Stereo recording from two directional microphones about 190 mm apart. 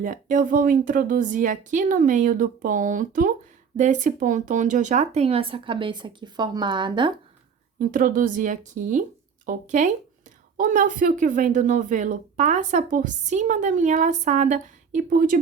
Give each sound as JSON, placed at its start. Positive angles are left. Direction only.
{"t": 0.0, "sound": "speech", "side_deg": -45}
{"t": 7.8, "sound": "speech", "side_deg": -45}